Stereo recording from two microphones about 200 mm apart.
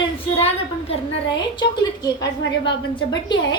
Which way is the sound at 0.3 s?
30° left (ahead or behind).